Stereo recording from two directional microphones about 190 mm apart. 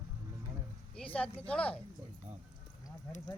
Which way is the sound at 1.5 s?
5° left (ahead or behind).